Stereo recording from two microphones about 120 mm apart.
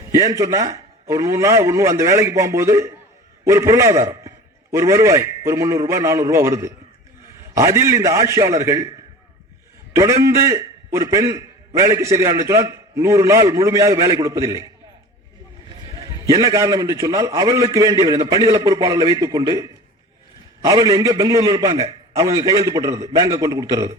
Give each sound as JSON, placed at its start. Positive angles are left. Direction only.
{"t": 0.1, "sound": "a man's voice", "side_deg": -30}
{"t": 9.9, "sound": "a man's voice", "side_deg": -25}
{"t": 16.0, "sound": "a man's voice", "side_deg": -30}